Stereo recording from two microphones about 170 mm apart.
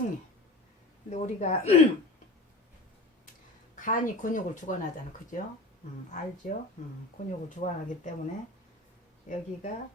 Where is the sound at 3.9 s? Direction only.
50° left (ahead or behind).